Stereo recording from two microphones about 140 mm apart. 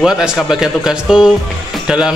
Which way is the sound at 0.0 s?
Centre (ahead or behind).